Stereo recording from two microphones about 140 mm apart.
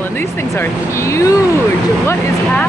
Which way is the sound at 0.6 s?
20° left (ahead or behind).